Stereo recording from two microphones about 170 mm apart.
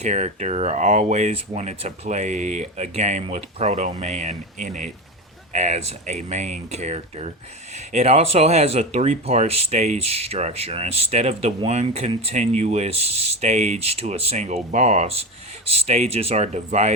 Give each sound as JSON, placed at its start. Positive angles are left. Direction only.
{"t": 0.0, "sound": "speech", "side_deg": -45}